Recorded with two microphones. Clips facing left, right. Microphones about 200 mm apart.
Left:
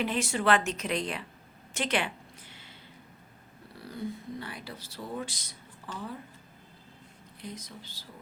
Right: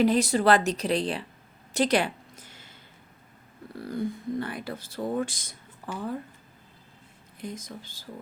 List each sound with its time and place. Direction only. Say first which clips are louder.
0.0 s speech: right 7 dB; 40° right (ahead or behind)
1.7 s a sound: right 7 dB; 35° right (ahead or behind)
3.8 s speech: right 6 dB; 50° right (ahead or behind)
7.4 s speech: right 5 dB; 50° right (ahead or behind)